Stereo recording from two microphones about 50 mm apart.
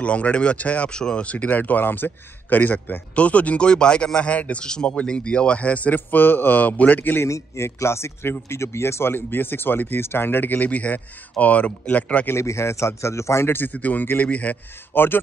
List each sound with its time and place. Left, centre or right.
0.0 s speech: left
4.6 s speech: centre
5.9 s speech: left
7.2 s a man's voice: left
12.4 s speech: left
13.7 s speech: left
14.9 s speech: left